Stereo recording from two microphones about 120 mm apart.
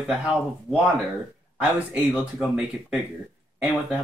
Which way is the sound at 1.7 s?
15° right (ahead or behind).